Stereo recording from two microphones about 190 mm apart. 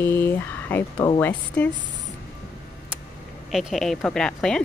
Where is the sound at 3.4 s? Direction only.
Centre (ahead or behind).